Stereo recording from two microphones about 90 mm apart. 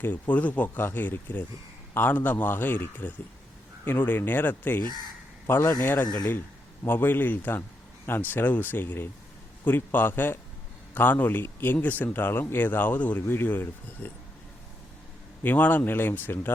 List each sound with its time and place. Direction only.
0.0 s a man's voice: 20° left (ahead or behind)
15.4 s a man's voice: 20° left (ahead or behind)